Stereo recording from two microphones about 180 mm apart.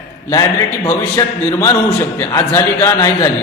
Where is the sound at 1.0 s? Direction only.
15° left (ahead or behind).